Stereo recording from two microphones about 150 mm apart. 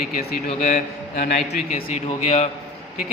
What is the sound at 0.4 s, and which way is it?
A man's voice, 50° left (ahead or behind).